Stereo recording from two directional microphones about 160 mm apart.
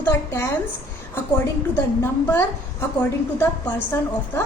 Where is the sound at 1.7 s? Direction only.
15° left (ahead or behind).